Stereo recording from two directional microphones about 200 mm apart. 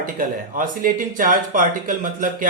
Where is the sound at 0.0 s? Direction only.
40° right (ahead or behind).